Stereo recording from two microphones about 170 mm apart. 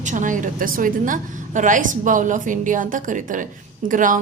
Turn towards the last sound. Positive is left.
turn(degrees=-50)  # may be behind; listen again after turning